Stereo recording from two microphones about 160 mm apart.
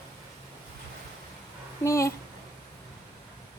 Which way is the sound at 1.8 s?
20° left (ahead or behind).